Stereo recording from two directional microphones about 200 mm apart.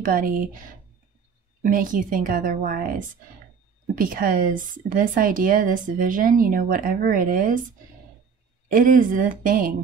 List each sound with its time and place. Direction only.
0.0 s speech: 45° right (ahead or behind)
1.6 s speech: 40° right (ahead or behind)
8.6 s speech: 45° right (ahead or behind)